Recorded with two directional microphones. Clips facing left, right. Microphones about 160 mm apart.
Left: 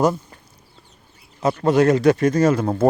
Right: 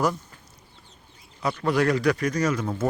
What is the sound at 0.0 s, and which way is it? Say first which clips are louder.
Speech: left 6 dB; 30° left (ahead or behind).